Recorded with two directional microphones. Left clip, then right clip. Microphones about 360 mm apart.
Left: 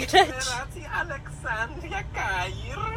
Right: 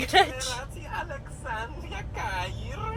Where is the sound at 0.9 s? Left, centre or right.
Left.